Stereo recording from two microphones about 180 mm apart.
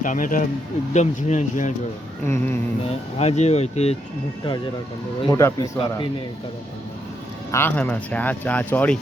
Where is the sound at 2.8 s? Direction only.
35° left (ahead or behind).